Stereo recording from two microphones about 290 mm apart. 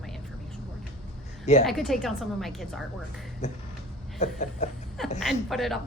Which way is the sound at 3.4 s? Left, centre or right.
Left.